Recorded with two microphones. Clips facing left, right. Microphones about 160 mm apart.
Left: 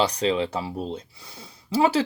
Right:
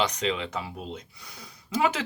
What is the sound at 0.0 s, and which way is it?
Speech, 35° left (ahead or behind).